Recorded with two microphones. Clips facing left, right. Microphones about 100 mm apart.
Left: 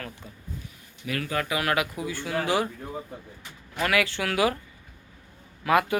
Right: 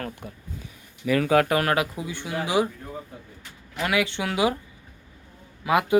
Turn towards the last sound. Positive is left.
turn(degrees=-15)  # may be behind; listen again after turning